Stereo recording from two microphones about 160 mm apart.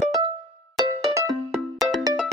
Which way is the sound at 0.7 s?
25° right (ahead or behind).